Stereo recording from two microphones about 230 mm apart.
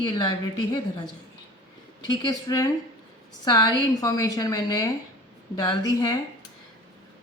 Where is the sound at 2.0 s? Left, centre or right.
Centre.